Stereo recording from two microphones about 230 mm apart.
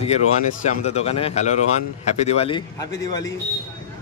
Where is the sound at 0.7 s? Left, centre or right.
Left.